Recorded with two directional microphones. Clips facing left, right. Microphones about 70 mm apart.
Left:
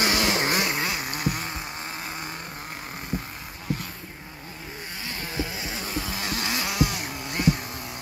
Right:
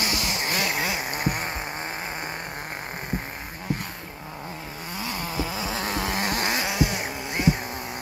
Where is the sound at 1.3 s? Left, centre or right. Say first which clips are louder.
Right 2 dB; right.